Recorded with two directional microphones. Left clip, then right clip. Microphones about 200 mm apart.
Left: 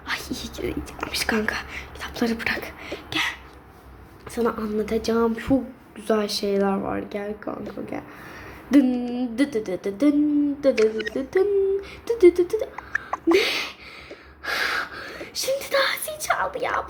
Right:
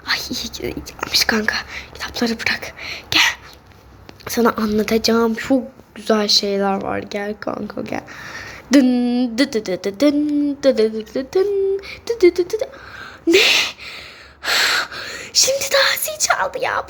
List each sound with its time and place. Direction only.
0.0 s speech: 5° right (ahead or behind)
13.1 s a sound: 25° right (ahead or behind)
14.4 s speech: 25° right (ahead or behind)